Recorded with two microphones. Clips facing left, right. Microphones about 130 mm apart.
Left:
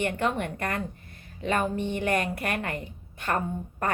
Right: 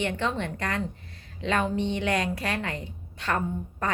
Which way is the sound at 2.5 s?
55° left (ahead or behind).